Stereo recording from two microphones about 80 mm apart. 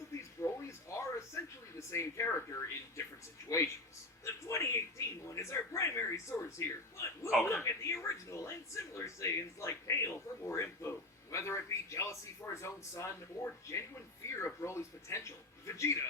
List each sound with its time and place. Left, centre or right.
0.2 s a sound: left
1.9 s speech: left
4.4 s speech: left